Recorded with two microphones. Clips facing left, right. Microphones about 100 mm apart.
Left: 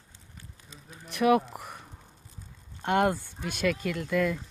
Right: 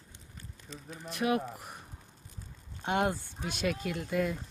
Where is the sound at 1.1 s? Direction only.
75° left (ahead or behind); by 1.8 s 60° left (ahead or behind).